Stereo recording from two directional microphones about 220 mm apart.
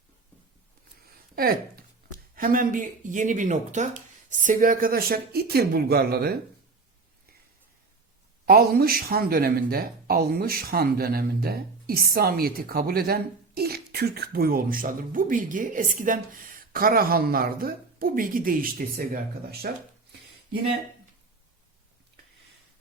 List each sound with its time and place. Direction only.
1.4 s speech: 40° right (ahead or behind)
8.4 s speech: 45° right (ahead or behind)